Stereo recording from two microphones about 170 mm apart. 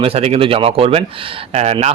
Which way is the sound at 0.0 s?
35° right (ahead or behind).